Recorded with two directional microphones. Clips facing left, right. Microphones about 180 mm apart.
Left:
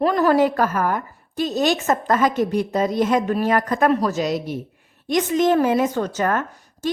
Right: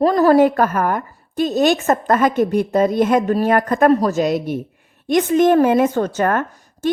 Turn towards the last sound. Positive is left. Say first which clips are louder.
# right 4 dB
turn(degrees=-50)  # may be behind; listen again after turning